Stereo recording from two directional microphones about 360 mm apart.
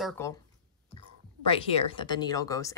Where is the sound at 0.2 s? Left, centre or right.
Centre.